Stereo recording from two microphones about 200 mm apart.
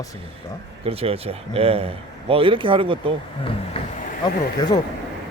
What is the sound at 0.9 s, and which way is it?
Speech, 30° right (ahead or behind).